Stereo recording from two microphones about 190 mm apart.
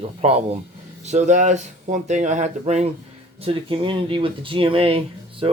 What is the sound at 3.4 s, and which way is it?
Speech, 25° right (ahead or behind).